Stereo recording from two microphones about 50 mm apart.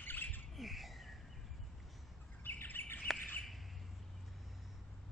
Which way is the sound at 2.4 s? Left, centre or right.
Left.